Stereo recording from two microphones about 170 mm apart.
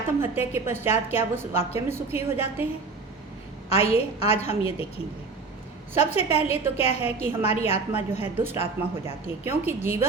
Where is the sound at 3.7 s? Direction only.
35° left (ahead or behind).